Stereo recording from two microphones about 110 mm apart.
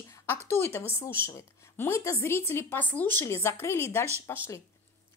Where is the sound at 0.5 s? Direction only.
20° left (ahead or behind).